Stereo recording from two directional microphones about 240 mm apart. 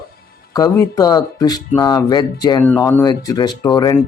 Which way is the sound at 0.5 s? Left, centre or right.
Centre.